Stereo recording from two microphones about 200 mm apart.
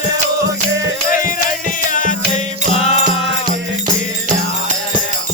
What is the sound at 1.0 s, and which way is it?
Music, 45° left (ahead or behind).